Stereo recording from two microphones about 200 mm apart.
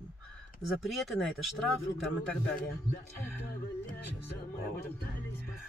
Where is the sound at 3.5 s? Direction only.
55° left (ahead or behind).